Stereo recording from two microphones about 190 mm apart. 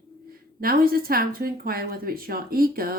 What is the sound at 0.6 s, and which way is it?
Speech, 50° right (ahead or behind).